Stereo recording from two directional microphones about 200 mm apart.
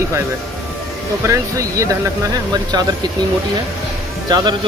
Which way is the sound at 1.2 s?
15° right (ahead or behind).